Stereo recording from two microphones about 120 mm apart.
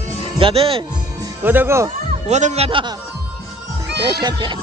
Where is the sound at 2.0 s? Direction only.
75° right (ahead or behind).